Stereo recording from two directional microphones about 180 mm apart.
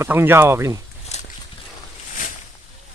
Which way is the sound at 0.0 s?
10° right (ahead or behind).